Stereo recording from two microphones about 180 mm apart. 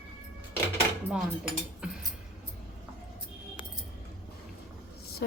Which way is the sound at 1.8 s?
5° right (ahead or behind).